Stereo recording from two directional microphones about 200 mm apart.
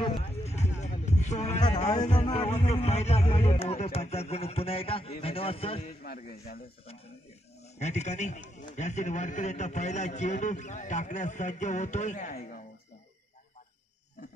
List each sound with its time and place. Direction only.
0.0 s music: 30° left (ahead or behind)
2.1 s speech: 25° left (ahead or behind)
2.5 s a man's voice: 35° left (ahead or behind)
6.0 s speech: 50° left (ahead or behind)
7.8 s a man's voice: 35° left (ahead or behind)